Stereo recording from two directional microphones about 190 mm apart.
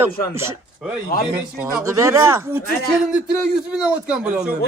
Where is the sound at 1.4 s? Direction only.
10° right (ahead or behind).